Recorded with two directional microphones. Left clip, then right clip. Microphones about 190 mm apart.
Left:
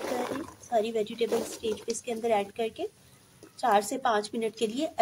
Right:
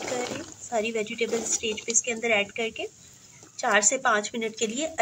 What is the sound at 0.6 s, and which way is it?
Speech, 25° left (ahead or behind).